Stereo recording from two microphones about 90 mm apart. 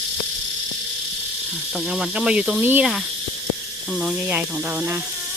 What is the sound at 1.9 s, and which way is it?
Speech, 10° right (ahead or behind).